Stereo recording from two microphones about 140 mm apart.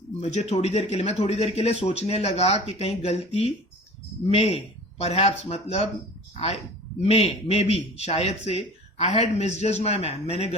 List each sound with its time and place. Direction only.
0.2 s a man's voice: 50° left (ahead or behind)